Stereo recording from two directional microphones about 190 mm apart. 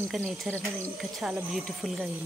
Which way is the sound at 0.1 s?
Centre (ahead or behind).